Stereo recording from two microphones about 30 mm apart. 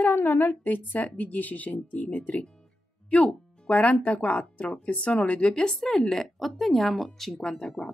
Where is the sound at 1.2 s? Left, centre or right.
Left.